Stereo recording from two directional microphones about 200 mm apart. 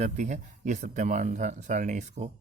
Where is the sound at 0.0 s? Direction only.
35° right (ahead or behind).